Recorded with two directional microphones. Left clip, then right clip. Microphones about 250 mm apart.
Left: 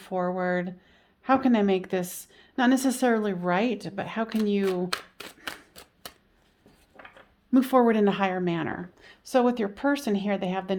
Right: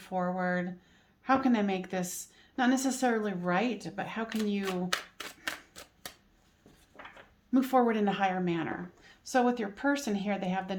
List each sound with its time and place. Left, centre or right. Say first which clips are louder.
0.0 s a woman's voice: left 4 dB; left
7.5 s a woman's voice: left 5 dB; left